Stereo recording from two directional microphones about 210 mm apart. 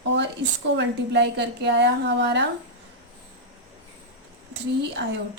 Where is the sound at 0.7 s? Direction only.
55° right (ahead or behind).